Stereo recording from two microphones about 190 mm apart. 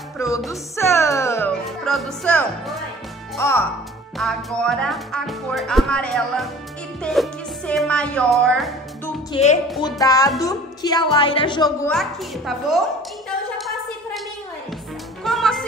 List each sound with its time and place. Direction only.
0.5 s music: 15° left (ahead or behind)
3.3 s speech: 15° left (ahead or behind)
4.2 s speech: centre (ahead or behind)
9.3 s speech: 35° left (ahead or behind)
9.8 s a woman's voice: 20° left (ahead or behind)
11.9 s speech: centre (ahead or behind)
13.6 s a sound: centre (ahead or behind)
15.2 s music: centre (ahead or behind)